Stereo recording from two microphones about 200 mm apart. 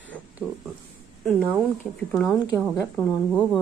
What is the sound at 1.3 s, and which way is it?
Speech, 5° right (ahead or behind).